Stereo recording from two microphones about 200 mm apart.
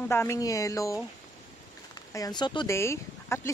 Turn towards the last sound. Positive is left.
turn(degrees=15)  # may be behind; listen again after turning